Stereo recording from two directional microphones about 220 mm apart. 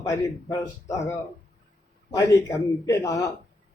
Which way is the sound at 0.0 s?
15° left (ahead or behind).